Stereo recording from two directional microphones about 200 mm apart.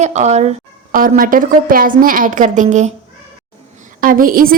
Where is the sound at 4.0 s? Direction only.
45° right (ahead or behind).